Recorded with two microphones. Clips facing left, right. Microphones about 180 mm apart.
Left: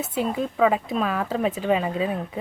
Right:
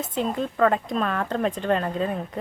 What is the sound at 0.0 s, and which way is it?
Speech, 5° left (ahead or behind).